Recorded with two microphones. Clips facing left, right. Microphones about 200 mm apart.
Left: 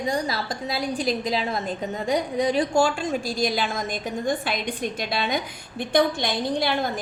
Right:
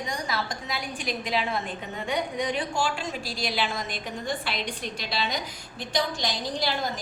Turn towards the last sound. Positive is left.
turn(degrees=55)  # may be behind; listen again after turning